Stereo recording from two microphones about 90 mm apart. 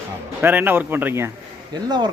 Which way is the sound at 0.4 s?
20° right (ahead or behind).